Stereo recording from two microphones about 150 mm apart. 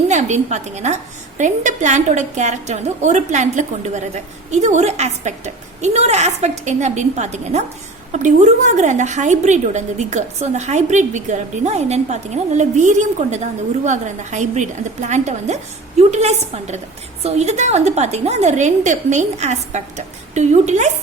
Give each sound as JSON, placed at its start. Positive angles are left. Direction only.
{"t": 0.1, "sound": "a woman's voice", "side_deg": -50}